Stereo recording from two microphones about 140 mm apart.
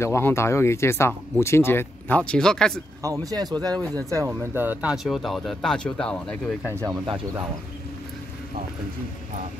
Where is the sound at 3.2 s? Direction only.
30° right (ahead or behind).